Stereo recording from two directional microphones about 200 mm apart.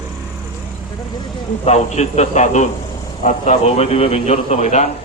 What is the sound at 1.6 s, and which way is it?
A man's voice, 35° left (ahead or behind).